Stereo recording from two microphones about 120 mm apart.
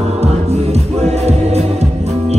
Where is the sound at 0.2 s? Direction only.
60° right (ahead or behind).